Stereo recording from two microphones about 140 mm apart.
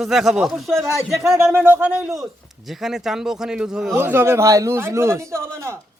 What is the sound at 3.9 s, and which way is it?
A man's voice, 15° right (ahead or behind).